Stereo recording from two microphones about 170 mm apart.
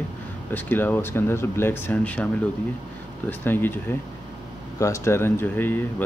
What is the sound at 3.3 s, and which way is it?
Speech, 10° left (ahead or behind).